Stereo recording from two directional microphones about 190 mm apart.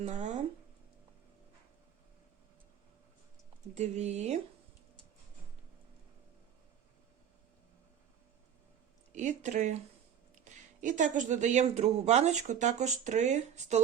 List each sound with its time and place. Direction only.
0.0 s speech: 40° right (ahead or behind)
3.8 s speech: 35° right (ahead or behind)
9.1 s speech: 40° right (ahead or behind)